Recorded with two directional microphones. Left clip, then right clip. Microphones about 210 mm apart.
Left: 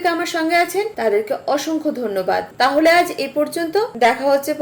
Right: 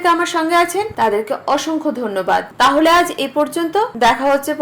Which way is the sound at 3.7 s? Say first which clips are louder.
Right 2 dB; 60° right (ahead or behind).